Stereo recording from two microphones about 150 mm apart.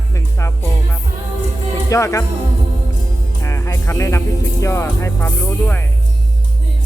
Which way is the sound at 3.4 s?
20° left (ahead or behind).